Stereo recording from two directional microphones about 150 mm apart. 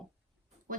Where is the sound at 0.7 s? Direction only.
65° right (ahead or behind).